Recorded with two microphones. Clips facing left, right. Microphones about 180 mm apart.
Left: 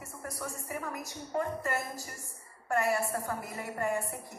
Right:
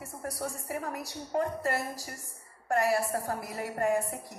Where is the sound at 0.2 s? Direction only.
35° right (ahead or behind).